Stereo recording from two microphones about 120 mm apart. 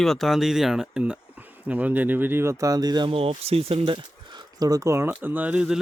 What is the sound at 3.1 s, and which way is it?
Speech, 55° right (ahead or behind).